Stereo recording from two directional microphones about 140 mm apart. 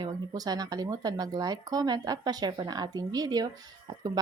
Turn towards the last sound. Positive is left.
turn(degrees=-30)  # may be behind; listen again after turning